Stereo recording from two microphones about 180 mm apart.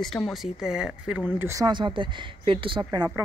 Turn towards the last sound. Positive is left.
turn(degrees=-25)  # may be behind; listen again after turning